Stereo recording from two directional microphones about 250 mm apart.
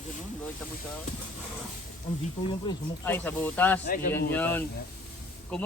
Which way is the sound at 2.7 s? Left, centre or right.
Centre.